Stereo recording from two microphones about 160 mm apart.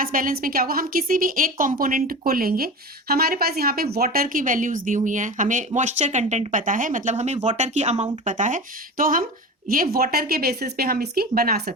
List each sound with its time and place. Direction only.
0.0 s a woman's voice: 60° right (ahead or behind)